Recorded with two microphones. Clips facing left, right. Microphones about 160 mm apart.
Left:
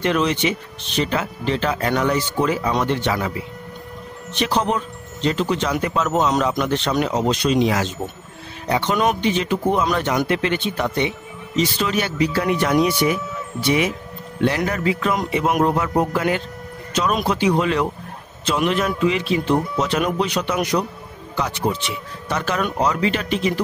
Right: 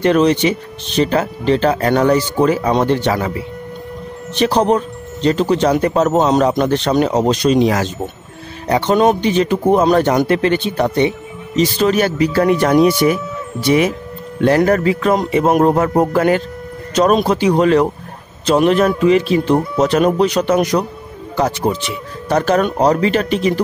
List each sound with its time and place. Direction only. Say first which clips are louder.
0.0 s speech: right 7 dB; 40° right (ahead or behind)
4.4 s speech: right 7 dB; 40° right (ahead or behind)